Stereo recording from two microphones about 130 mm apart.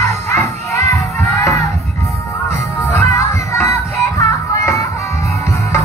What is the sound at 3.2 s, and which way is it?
Music, 25° left (ahead or behind).